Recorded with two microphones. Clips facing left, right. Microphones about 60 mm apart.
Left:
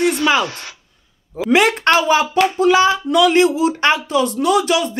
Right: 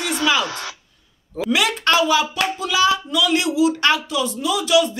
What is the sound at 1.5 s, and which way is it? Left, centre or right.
Speech, left.